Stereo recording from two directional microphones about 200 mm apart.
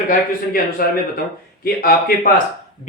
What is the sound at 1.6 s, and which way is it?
Speech, 50° left (ahead or behind).